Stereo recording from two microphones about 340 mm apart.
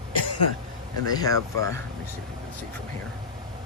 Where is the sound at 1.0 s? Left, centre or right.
Centre.